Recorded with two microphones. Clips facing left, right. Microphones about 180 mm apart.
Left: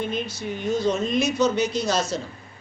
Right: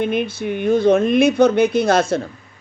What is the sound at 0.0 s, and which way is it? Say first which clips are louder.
Speech: right 8 dB; 60° right (ahead or behind).